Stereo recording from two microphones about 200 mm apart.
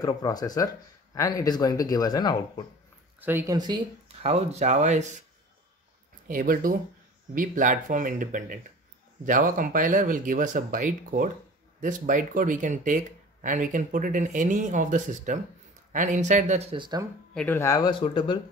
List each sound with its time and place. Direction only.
0.0 s speech: 20° left (ahead or behind)
3.2 s speech: 10° right (ahead or behind); by 5.0 s 35° right (ahead or behind)
6.2 s speech: 45° right (ahead or behind)
16.7 s speech: 25° right (ahead or behind)
17.3 s speech: 5° left (ahead or behind); by 18.4 s 25° left (ahead or behind)